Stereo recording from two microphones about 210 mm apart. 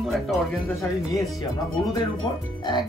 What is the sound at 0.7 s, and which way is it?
Speech, 15° left (ahead or behind).